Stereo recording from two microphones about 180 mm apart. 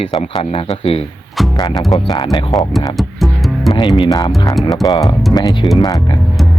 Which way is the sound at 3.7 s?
20° left (ahead or behind).